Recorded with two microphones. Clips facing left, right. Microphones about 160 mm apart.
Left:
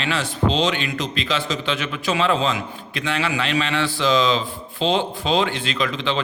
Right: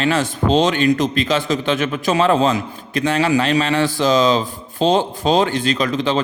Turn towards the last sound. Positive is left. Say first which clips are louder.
# right 5 dB
turn(degrees=-40)  # may be behind; listen again after turning